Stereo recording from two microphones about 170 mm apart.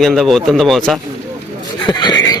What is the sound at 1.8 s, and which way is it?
Speech, 25° left (ahead or behind).